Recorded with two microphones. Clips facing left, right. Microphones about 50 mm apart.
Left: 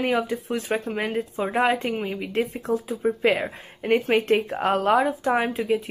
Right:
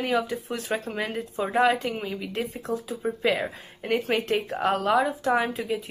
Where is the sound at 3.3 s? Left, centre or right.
Centre.